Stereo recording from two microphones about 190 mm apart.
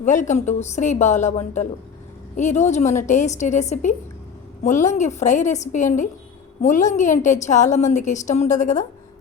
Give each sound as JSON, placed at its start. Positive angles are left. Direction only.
{"t": 0.0, "sound": "a woman's voice", "side_deg": 40}